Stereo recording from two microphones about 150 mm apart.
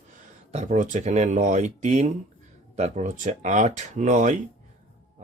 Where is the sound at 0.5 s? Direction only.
50° right (ahead or behind).